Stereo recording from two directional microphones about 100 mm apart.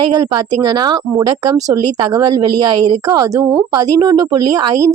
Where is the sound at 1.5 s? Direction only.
35° right (ahead or behind).